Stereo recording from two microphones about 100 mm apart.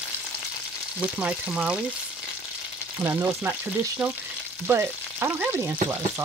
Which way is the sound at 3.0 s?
20° right (ahead or behind).